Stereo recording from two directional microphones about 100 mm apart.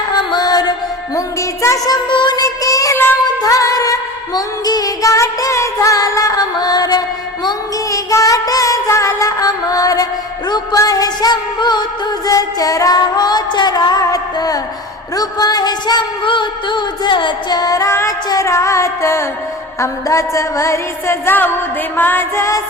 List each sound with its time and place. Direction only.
0.1 s music: 45° left (ahead or behind)
2.4 s music: 35° left (ahead or behind)